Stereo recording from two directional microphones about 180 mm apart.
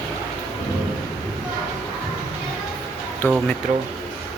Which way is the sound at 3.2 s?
10° left (ahead or behind).